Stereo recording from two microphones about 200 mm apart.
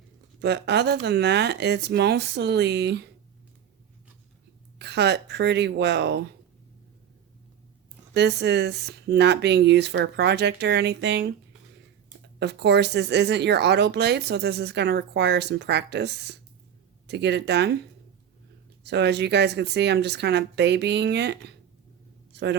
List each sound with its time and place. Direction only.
0.3 s speech: 60° right (ahead or behind)
4.8 s speech: 60° right (ahead or behind)
8.1 s speech: 60° right (ahead or behind)
12.4 s speech: 60° right (ahead or behind)
22.3 s a sound: 60° right (ahead or behind)